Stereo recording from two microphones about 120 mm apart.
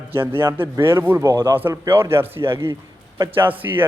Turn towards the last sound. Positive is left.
turn(degrees=-15)  # may be behind; listen again after turning